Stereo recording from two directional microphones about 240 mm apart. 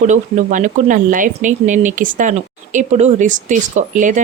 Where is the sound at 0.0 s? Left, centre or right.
Right.